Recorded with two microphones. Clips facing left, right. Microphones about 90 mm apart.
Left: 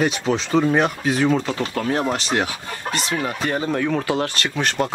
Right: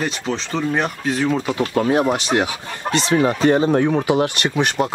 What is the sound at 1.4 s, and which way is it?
Speech, 15° right (ahead or behind).